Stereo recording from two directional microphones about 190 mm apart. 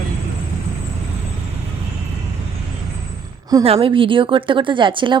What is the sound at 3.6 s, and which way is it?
Speech, 30° right (ahead or behind).